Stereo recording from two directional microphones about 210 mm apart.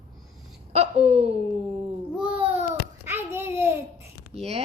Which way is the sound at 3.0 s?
10° right (ahead or behind).